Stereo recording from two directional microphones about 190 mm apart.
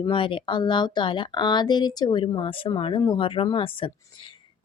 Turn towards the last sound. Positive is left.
turn(degrees=25)  # may be behind; listen again after turning